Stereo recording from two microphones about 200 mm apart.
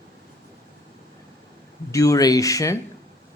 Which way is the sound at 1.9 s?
15° left (ahead or behind).